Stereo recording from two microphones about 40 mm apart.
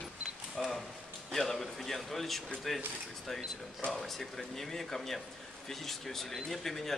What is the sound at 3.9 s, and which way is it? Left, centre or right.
Speech, centre.